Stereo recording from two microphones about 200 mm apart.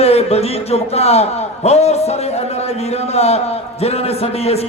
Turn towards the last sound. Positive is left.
turn(degrees=30)  # may be behind; listen again after turning